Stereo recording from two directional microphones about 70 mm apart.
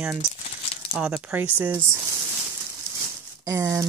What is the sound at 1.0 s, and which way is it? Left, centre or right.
Speech, centre.